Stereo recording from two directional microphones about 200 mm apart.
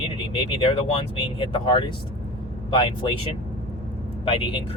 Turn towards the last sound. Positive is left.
turn(degrees=25)  # may be behind; listen again after turning